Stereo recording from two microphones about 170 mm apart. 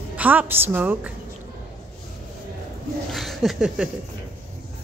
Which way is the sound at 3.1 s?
Centre (ahead or behind).